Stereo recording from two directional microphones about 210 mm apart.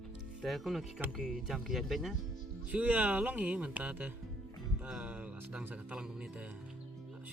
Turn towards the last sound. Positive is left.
turn(degrees=-5)  # may be behind; listen again after turning